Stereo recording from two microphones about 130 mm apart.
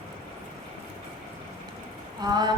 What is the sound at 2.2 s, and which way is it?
Speech, 30° right (ahead or behind).